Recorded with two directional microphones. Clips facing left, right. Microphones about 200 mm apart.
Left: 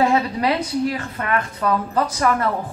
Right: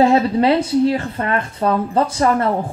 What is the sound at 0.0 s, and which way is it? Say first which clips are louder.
Speech: right 5 dB; 30° right (ahead or behind).